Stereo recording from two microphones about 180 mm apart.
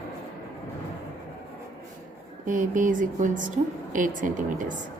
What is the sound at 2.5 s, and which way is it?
Speech, 45° right (ahead or behind).